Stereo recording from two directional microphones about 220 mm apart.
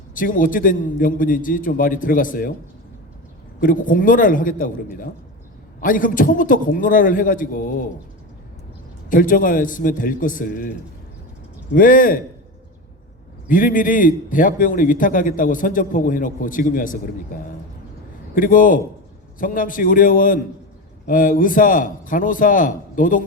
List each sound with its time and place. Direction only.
0.1 s a man's voice: 40° left (ahead or behind)
3.6 s a man's voice: 40° left (ahead or behind)
9.0 s a man's voice: 40° left (ahead or behind)
11.7 s a man's voice: 40° left (ahead or behind)
13.5 s a man's voice: 40° left (ahead or behind)